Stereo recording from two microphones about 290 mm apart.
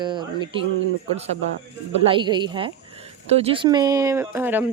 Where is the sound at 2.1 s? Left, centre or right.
Centre.